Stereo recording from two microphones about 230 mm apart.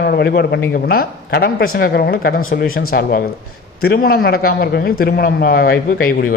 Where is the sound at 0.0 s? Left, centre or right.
Left.